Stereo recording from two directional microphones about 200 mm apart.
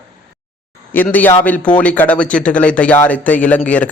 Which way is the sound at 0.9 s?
10° left (ahead or behind).